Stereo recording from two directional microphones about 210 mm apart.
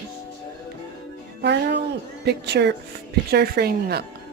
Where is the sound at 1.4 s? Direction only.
55° right (ahead or behind).